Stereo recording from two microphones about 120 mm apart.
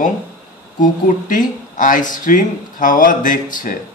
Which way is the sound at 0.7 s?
90° left.